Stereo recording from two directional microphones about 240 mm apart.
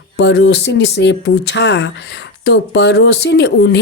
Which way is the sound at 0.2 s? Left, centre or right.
Left.